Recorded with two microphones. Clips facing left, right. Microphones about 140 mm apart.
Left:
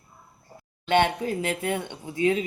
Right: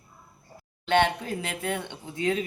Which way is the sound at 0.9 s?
15° left (ahead or behind).